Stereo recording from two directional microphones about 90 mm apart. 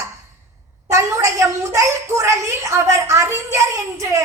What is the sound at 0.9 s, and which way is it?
A woman's voice, 30° right (ahead or behind).